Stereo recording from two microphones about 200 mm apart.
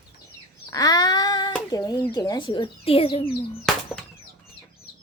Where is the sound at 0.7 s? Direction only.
20° left (ahead or behind).